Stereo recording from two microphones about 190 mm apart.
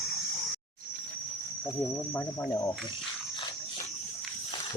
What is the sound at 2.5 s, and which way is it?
Speech, 25° left (ahead or behind).